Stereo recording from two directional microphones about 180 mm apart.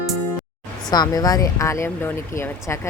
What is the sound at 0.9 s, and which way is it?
Speech, 20° left (ahead or behind).